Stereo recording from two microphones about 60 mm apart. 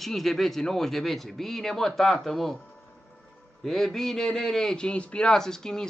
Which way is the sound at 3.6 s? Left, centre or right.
Centre.